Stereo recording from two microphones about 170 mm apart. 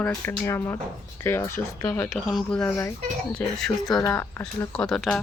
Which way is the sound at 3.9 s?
25° left (ahead or behind).